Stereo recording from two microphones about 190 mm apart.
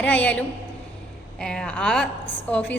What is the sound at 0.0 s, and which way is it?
A woman's voice, 5° left (ahead or behind).